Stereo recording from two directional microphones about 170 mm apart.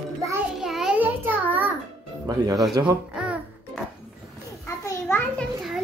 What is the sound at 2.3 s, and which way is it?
Speech, 20° right (ahead or behind).